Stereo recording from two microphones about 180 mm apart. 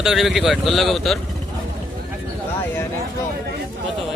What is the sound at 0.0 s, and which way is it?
Speech, centre (ahead or behind).